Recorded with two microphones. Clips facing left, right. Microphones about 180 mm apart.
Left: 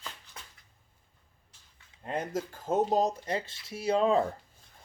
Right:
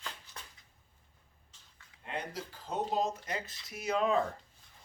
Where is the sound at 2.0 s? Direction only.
45° left (ahead or behind).